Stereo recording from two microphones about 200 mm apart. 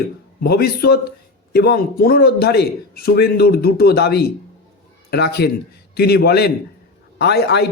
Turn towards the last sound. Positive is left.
turn(degrees=55)  # may be behind; listen again after turning